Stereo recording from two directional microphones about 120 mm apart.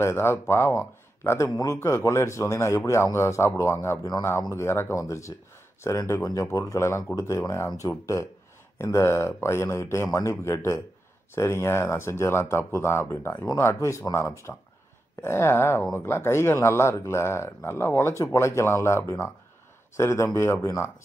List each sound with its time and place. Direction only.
0.0 s speech: 20° left (ahead or behind)